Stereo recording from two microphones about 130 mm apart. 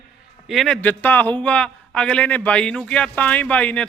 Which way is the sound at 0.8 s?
15° left (ahead or behind).